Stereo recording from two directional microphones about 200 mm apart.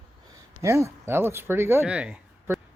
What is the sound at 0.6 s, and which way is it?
Speech, 15° right (ahead or behind).